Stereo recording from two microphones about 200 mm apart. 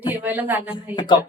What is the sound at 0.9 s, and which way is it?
Speech, 20° left (ahead or behind).